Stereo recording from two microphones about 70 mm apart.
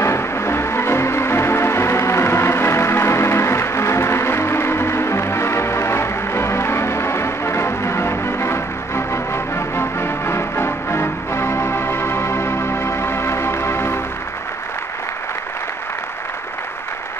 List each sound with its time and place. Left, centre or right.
0.0 s music: left